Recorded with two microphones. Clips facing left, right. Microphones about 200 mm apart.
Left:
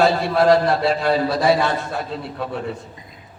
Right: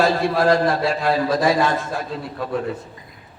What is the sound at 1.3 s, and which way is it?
A man's voice, 45° right (ahead or behind).